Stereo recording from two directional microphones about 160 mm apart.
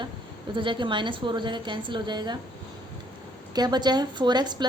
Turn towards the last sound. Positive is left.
turn(degrees=-25)  # may be behind; listen again after turning